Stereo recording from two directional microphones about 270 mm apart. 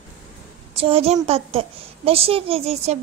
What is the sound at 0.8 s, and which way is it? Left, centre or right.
A woman's voice, right.